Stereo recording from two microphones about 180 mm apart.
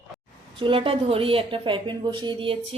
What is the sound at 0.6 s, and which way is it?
Speech, 30° right (ahead or behind).